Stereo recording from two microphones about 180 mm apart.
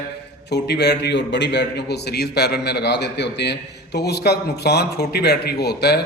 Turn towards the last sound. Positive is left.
turn(degrees=65)  # may be behind; listen again after turning